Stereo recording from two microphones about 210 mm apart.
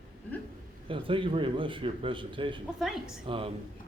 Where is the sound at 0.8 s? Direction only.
25° right (ahead or behind).